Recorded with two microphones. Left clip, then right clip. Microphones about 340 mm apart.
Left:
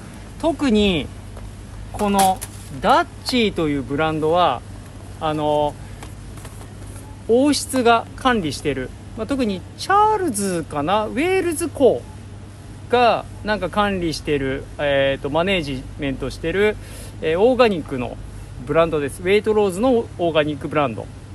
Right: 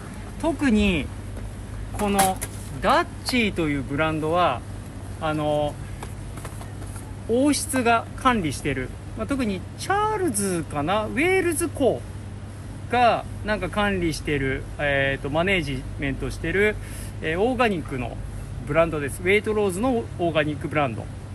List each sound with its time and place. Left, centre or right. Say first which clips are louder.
0.4 s speech: left 4 dB; left
2.8 s speech: left 4 dB; left
7.8 s speech: left 4 dB; left
12.9 s speech: left 4 dB; left